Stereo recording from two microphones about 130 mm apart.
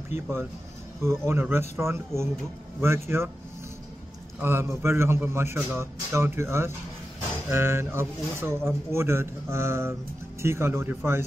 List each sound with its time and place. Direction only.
1.0 s speech: 20° right (ahead or behind)
4.4 s speech: 20° right (ahead or behind)